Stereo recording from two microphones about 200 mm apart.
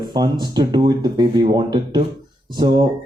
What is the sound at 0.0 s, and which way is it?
Speech, 20° right (ahead or behind).